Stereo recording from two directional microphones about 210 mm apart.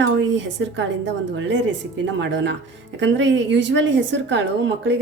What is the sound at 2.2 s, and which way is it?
A woman's voice, 60° right (ahead or behind).